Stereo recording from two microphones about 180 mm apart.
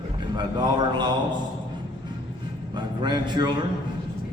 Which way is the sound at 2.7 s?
25° right (ahead or behind).